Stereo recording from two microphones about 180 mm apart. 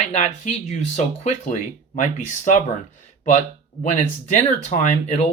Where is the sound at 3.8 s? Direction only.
40° left (ahead or behind).